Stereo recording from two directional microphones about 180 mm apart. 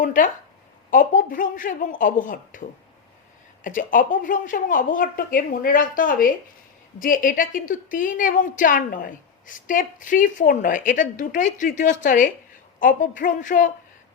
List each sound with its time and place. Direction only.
0.0 s a woman's voice: 50° left (ahead or behind)